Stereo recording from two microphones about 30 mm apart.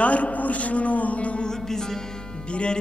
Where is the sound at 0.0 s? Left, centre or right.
Left.